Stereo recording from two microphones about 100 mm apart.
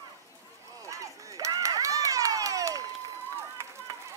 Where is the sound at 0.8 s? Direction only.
35° right (ahead or behind).